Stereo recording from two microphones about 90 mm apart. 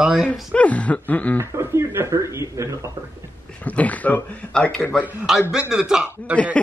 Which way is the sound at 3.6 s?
15° left (ahead or behind).